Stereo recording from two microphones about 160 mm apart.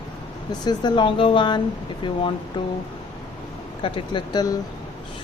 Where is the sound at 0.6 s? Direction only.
25° left (ahead or behind).